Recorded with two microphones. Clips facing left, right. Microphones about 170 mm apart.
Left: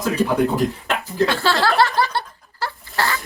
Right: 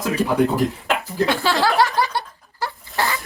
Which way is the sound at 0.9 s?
Centre (ahead or behind).